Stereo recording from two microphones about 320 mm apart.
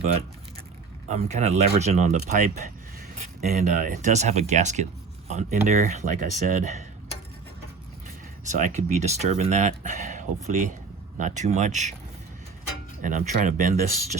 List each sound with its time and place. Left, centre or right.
1.0 s speech: right
8.4 s speech: right
13.0 s speech: right